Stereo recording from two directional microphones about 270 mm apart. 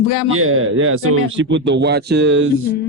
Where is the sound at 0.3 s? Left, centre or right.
Right.